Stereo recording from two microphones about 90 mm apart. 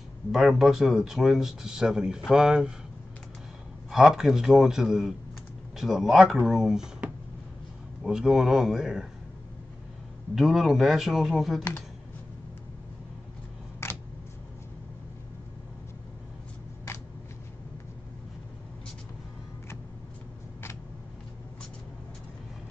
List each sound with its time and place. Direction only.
0.3 s speech: 5° right (ahead or behind)
3.9 s speech: 5° right (ahead or behind)
8.0 s speech: 5° right (ahead or behind)
10.3 s speech: centre (ahead or behind)
13.8 s a sound: 30° left (ahead or behind)